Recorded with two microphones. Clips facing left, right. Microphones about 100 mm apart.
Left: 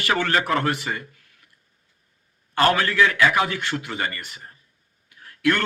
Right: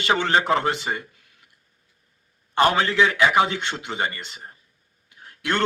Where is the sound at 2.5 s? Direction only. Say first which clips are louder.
Even; 20° right (ahead or behind).